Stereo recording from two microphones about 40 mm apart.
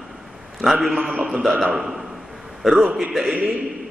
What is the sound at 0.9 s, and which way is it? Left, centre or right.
Speech, right.